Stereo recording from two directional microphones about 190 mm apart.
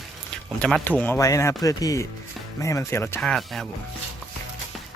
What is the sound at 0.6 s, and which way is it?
Speech, 5° left (ahead or behind).